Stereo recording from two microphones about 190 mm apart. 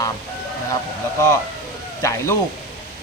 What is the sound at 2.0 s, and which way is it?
Speech, 15° left (ahead or behind).